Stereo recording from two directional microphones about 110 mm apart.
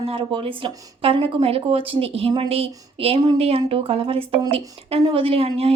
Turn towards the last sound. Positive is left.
turn(degrees=-60)  # may be behind; listen again after turning